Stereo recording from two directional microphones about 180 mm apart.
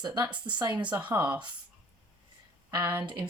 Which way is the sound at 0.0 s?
20° right (ahead or behind).